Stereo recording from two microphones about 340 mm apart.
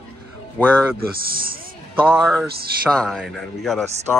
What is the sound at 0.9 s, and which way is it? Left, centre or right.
Speech, right.